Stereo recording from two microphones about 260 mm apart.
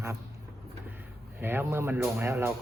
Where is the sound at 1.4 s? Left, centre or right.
Centre.